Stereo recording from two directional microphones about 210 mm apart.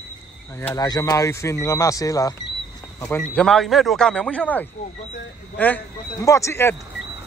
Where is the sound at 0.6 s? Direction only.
15° left (ahead or behind).